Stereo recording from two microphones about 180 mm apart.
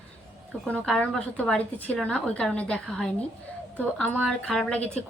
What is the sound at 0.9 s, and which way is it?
A woman's voice, 5° left (ahead or behind).